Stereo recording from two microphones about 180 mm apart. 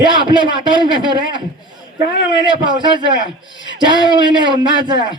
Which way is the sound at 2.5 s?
25° right (ahead or behind).